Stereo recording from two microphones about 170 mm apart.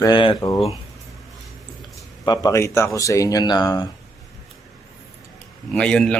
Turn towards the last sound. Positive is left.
turn(degrees=5)  # may be behind; listen again after turning